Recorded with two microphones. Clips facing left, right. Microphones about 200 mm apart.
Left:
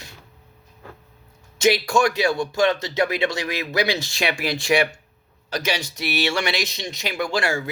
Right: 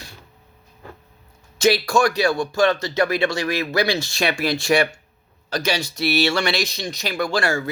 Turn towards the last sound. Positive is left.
turn(degrees=15)  # may be behind; listen again after turning